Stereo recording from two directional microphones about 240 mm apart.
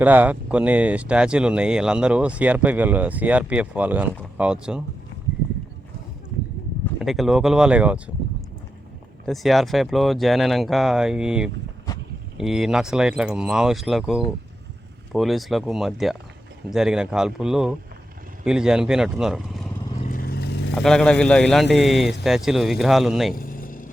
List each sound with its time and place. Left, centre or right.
0.0 s speech: centre
7.0 s speech: centre
9.2 s speech: centre
11.9 s a sound: centre
12.4 s speech: centre
20.1 s vehicle: left
20.7 s speech: centre
23.3 s vehicle: left